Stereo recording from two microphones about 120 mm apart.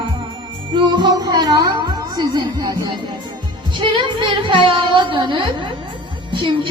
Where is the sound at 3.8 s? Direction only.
45° right (ahead or behind).